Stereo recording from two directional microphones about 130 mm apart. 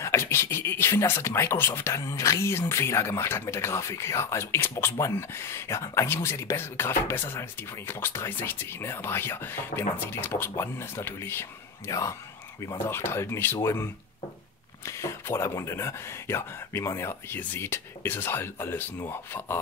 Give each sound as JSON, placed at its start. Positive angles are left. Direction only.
{"t": 0.0, "sound": "speech", "side_deg": 20}
{"t": 14.9, "sound": "speech", "side_deg": 20}